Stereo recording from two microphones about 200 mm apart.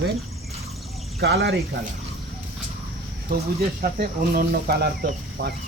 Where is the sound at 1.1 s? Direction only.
50° right (ahead or behind).